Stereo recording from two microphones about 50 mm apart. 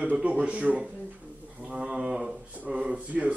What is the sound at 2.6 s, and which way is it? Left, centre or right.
Speech, right.